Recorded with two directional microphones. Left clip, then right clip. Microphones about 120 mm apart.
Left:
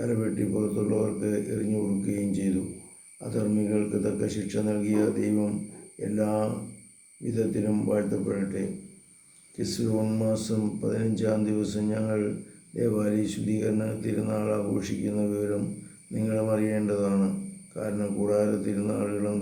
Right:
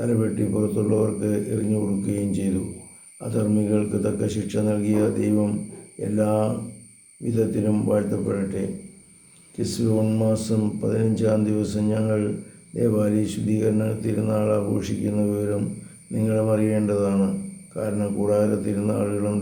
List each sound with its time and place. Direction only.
0.0 s speech: 20° right (ahead or behind)